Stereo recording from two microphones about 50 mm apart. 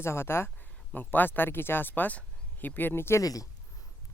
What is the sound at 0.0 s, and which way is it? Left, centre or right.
Speech, left.